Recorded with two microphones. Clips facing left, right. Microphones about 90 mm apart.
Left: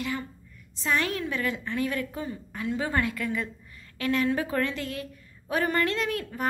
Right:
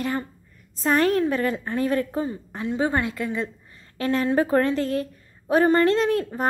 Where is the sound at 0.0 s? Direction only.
40° right (ahead or behind).